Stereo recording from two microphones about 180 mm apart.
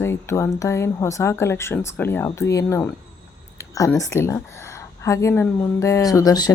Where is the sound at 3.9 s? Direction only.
15° left (ahead or behind).